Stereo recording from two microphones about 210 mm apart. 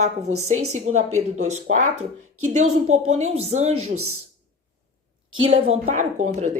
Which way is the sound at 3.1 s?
30° right (ahead or behind).